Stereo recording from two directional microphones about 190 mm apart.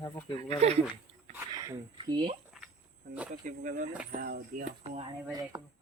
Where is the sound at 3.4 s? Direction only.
40° right (ahead or behind).